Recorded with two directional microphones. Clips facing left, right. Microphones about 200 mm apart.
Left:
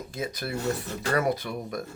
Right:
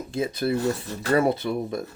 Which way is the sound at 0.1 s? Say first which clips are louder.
Right 9 dB; 25° right (ahead or behind).